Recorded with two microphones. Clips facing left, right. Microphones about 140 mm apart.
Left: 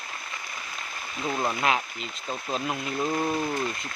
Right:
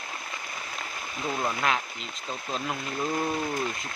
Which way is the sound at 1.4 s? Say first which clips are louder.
Left 2 dB; 5° left (ahead or behind).